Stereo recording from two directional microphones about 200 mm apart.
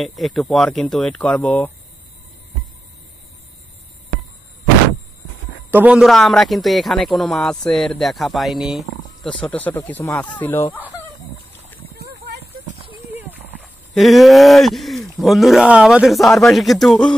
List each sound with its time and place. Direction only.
0.0 s a man's voice: centre (ahead or behind)
5.7 s a man's voice: 5° right (ahead or behind); by 10.8 s 10° left (ahead or behind)
11.9 s a sound: 50° right (ahead or behind)
13.1 s horse: 10° right (ahead or behind)
13.9 s a man's voice: centre (ahead or behind)